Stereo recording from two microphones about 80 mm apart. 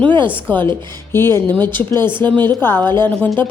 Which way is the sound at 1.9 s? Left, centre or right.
Right.